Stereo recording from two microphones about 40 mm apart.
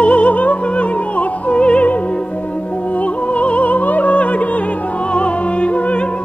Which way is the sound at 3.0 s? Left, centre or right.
Left.